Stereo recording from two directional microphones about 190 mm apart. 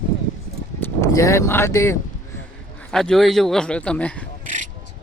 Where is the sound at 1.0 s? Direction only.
15° left (ahead or behind).